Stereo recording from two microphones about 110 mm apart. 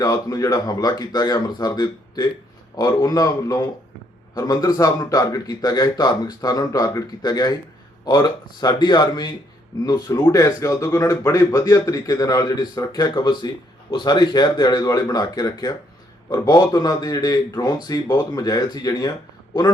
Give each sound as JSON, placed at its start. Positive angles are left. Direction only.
{"t": 0.0, "sound": "a man's voice", "side_deg": 35}